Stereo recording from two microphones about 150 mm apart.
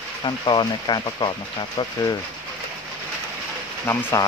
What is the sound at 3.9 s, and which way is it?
Speech, 15° left (ahead or behind).